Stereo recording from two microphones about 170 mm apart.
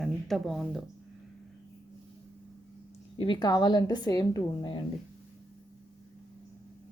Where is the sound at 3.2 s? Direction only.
25° left (ahead or behind).